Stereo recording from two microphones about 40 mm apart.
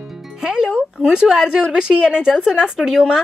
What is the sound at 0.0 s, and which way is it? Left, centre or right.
Music, centre.